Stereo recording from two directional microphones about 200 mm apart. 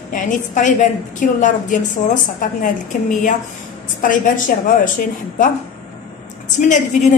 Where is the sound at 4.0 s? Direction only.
40° left (ahead or behind).